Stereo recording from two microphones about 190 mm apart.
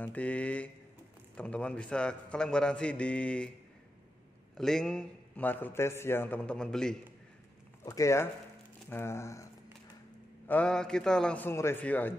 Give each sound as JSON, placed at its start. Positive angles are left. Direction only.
{"t": 0.0, "sound": "a man's voice", "side_deg": 10}
{"t": 4.6, "sound": "a man's voice", "side_deg": 0}
{"t": 7.8, "sound": "a man's voice", "side_deg": 15}